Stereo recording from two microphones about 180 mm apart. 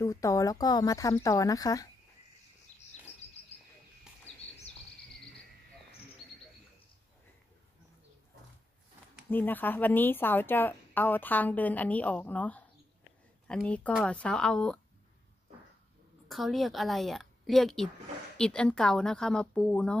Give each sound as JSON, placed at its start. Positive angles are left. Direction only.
{"t": 0.0, "sound": "speech", "side_deg": 15}
{"t": 2.7, "sound": "bird", "side_deg": 40}
{"t": 4.3, "sound": "bird", "side_deg": 35}
{"t": 9.3, "sound": "a woman's voice", "side_deg": 10}
{"t": 16.3, "sound": "a woman's voice", "side_deg": 0}